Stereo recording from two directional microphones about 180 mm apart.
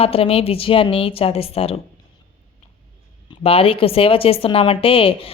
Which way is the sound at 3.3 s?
30° left (ahead or behind).